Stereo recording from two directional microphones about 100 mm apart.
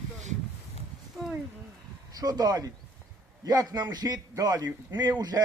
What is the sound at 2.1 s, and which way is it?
A man's voice, 40° right (ahead or behind).